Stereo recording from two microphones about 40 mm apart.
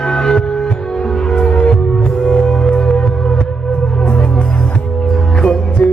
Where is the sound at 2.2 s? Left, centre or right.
Centre.